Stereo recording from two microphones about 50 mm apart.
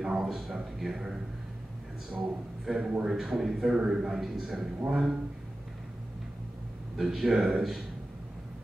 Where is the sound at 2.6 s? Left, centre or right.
Centre.